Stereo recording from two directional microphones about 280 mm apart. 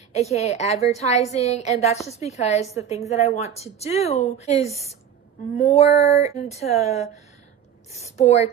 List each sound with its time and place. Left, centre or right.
0.1 s speech: left
2.6 s a woman's voice: centre
3.1 s speech: left